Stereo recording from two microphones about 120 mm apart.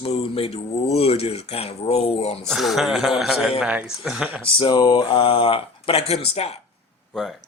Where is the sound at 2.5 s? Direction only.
Centre (ahead or behind).